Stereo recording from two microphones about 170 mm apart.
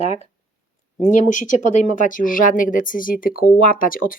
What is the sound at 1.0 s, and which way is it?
Speech, 45° left (ahead or behind).